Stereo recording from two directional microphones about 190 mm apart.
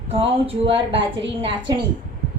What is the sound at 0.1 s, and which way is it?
Speech, 30° right (ahead or behind).